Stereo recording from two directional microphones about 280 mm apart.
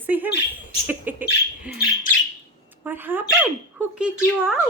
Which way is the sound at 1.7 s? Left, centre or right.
Left.